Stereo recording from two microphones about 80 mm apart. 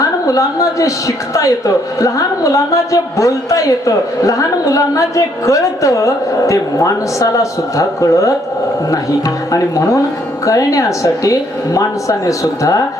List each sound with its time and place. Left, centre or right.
0.0 s a woman's voice: left
9.5 s a woman's voice: left